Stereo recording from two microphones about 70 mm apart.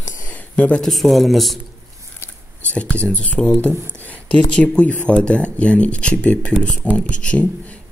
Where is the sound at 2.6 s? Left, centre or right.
Centre.